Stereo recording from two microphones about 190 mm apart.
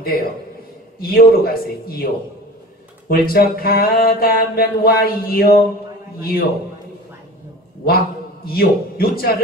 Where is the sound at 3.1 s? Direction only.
50° left (ahead or behind).